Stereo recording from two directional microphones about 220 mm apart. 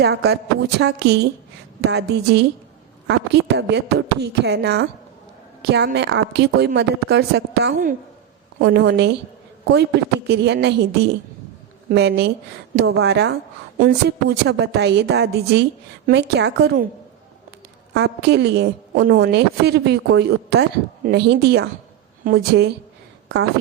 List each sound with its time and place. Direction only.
0.0 s a woman's voice: 50° right (ahead or behind)
10.2 s a woman's voice: 50° right (ahead or behind)
17.9 s a woman's voice: 50° right (ahead or behind)